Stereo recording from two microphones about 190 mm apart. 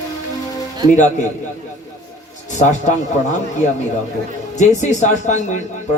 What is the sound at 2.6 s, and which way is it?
Speech, 40° left (ahead or behind).